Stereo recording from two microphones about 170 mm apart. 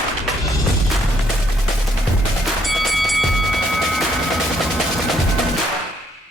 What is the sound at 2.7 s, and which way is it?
Music, centre (ahead or behind).